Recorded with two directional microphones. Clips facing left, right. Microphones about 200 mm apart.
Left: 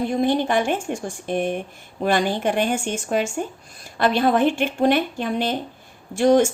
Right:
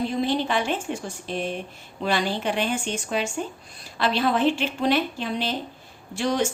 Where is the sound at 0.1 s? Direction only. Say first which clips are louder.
Left 4 dB; 50° left (ahead or behind).